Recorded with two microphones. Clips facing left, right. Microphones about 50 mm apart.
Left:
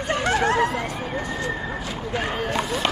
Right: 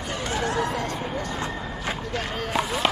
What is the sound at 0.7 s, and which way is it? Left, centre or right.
Emergency vehicle, centre.